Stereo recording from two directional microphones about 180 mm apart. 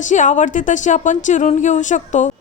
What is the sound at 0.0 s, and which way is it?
A woman's voice, 45° left (ahead or behind).